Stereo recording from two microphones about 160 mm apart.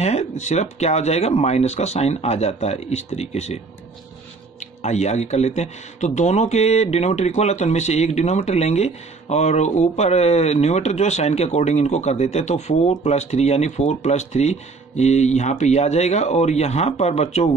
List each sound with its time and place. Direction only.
0.0 s speech: 45° left (ahead or behind)